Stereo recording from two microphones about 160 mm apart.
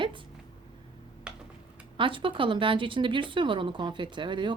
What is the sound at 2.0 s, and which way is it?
A woman's voice, 30° right (ahead or behind).